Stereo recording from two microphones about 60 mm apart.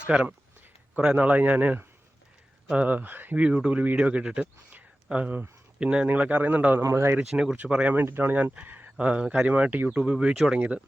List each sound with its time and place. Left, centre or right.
0.1 s a man's voice: centre
3.4 s a man's voice: centre
6.8 s speech: right
7.3 s speech: centre
8.0 s speech: right
9.0 s a man's voice: centre
10.0 s speech: centre
10.3 s speech: centre